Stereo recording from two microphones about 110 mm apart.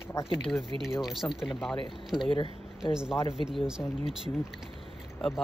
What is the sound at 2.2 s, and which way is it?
Speech, 50° left (ahead or behind).